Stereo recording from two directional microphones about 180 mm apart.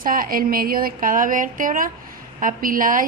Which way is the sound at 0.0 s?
50° right (ahead or behind).